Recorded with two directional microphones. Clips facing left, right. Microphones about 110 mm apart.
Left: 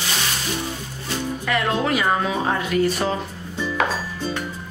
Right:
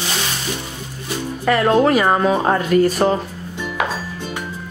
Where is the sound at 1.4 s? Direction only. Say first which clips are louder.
Right 8 dB; 40° right (ahead or behind).